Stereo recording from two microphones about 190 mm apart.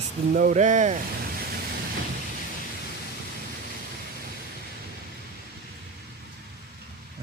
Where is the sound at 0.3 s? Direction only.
40° right (ahead or behind).